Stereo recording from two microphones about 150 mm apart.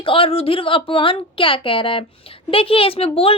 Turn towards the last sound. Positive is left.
turn(degrees=40)  # may be behind; listen again after turning